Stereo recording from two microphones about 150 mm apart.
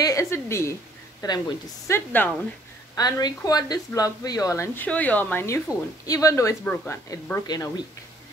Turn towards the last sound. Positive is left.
turn(degrees=25)  # may be behind; listen again after turning